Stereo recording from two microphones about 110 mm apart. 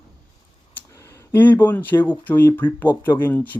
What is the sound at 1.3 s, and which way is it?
Speech, 20° left (ahead or behind).